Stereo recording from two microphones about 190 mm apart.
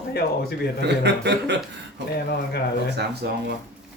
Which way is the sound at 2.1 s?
60° left (ahead or behind).